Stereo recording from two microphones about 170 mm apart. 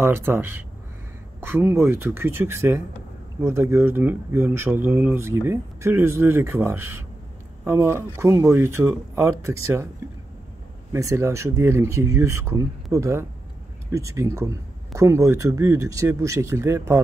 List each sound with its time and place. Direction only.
0.0 s speech: 15° right (ahead or behind)
10.9 s speech: 15° right (ahead or behind)